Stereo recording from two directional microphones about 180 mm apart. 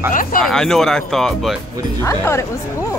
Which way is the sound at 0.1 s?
50° left (ahead or behind).